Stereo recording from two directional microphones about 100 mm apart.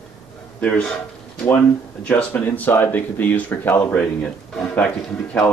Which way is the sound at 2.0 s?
15° left (ahead or behind).